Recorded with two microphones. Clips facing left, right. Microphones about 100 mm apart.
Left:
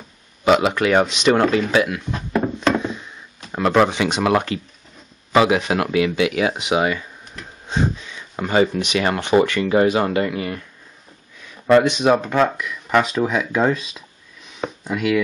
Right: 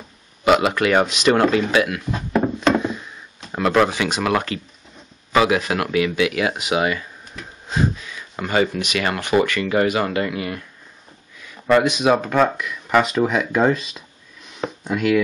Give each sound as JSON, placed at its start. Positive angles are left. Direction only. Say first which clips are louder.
{"t": 0.5, "sound": "speech", "louder": "even", "side_deg": 0}
{"t": 3.9, "sound": "speech", "louder": "left 2 dB", "side_deg": 25}
{"t": 7.3, "sound": "a sound", "louder": "right 1 dB", "side_deg": 0}
{"t": 7.7, "sound": "speech", "louder": "even", "side_deg": 25}
{"t": 10.3, "sound": "speech", "louder": "left 1 dB", "side_deg": 0}
{"t": 11.7, "sound": "speech", "louder": "left 2 dB", "side_deg": -5}
{"t": 14.5, "sound": "a sound", "louder": "right 1 dB", "side_deg": 0}